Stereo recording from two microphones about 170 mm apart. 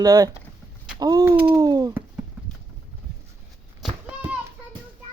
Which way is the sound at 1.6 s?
20° right (ahead or behind).